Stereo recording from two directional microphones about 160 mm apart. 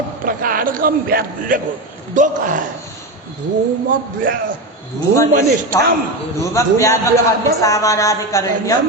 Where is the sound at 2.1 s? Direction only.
55° right (ahead or behind).